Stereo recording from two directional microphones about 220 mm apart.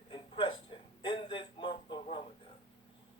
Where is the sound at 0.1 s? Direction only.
25° left (ahead or behind).